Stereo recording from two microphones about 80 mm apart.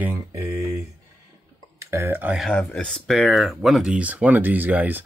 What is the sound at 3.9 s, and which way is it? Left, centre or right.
Speech, centre.